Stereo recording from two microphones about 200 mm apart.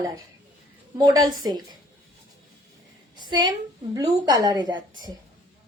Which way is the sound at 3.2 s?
20° right (ahead or behind).